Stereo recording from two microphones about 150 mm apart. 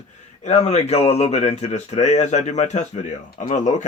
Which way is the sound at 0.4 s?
50° left (ahead or behind).